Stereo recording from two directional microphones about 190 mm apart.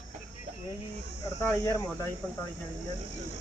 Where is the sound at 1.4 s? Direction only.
15° left (ahead or behind).